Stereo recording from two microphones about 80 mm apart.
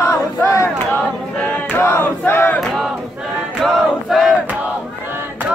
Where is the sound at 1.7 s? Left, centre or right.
Left.